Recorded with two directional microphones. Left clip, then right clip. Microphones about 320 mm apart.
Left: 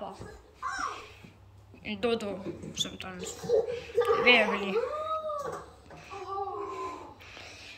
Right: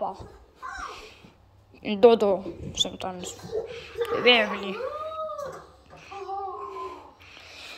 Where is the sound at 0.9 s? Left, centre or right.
Centre.